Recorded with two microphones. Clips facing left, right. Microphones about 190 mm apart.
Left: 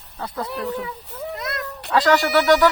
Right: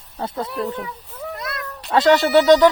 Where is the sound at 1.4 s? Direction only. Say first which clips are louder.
Left 3 dB; 25° left (ahead or behind).